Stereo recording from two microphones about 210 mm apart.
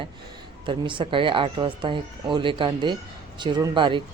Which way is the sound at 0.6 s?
25° right (ahead or behind).